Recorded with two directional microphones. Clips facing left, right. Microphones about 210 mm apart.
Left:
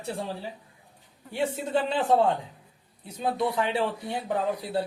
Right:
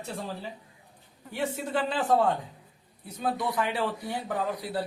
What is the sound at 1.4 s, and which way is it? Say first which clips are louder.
Speech: left 3 dB; 30° left (ahead or behind).